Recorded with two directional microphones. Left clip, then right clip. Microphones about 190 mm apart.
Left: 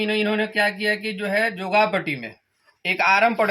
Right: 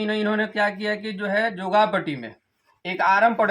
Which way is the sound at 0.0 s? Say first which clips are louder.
Left 2 dB; 5° left (ahead or behind).